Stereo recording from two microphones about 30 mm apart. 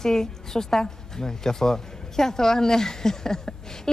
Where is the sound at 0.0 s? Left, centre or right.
Centre.